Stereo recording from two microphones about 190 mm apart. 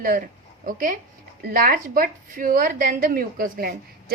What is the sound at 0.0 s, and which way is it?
A woman's voice, 50° right (ahead or behind).